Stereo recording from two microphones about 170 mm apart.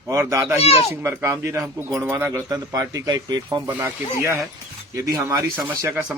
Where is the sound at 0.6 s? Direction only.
35° left (ahead or behind).